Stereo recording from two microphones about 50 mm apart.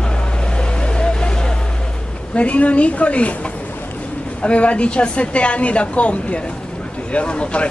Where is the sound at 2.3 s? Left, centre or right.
Left.